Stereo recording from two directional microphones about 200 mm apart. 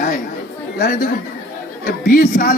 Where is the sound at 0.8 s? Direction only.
50° left (ahead or behind).